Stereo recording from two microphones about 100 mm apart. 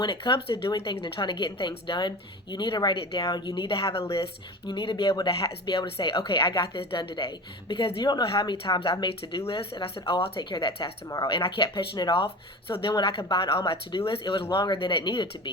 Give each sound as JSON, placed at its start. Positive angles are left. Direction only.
{"t": 0.0, "sound": "a woman's voice", "side_deg": 55}
{"t": 5.6, "sound": "a woman's voice", "side_deg": 50}
{"t": 10.5, "sound": "a woman's voice", "side_deg": 55}
{"t": 12.1, "sound": "a woman's voice", "side_deg": 60}